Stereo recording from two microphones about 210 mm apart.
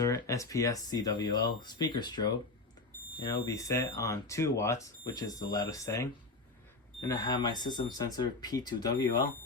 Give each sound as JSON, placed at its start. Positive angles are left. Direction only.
{"t": 0.0, "sound": "speech", "side_deg": 15}